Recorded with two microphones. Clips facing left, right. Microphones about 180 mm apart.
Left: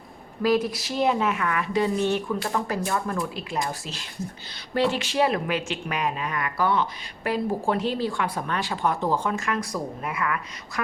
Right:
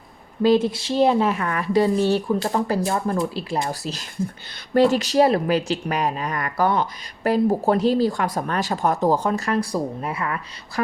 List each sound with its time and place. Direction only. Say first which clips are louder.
0.4 s speech: right 5 dB; 25° right (ahead or behind)